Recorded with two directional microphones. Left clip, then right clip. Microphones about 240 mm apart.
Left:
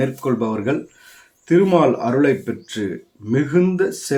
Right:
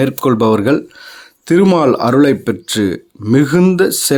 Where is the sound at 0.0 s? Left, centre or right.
Right.